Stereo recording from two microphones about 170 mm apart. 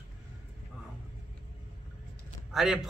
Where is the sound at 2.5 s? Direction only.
Centre (ahead or behind).